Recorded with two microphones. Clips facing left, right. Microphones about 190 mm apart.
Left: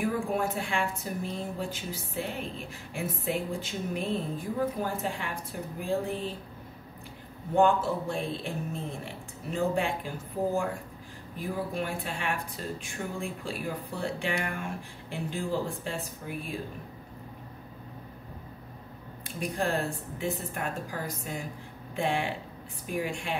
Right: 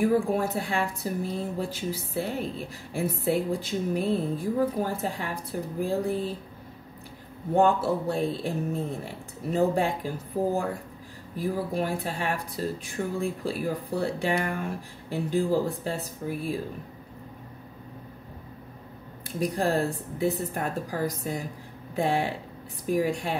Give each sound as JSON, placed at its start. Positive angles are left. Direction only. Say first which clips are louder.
{"t": 0.0, "sound": "a woman's voice", "louder": "right 5 dB", "side_deg": -35}
{"t": 7.5, "sound": "a woman's voice", "louder": "right 2 dB", "side_deg": -35}
{"t": 19.5, "sound": "a woman's voice", "louder": "right 3 dB", "side_deg": -35}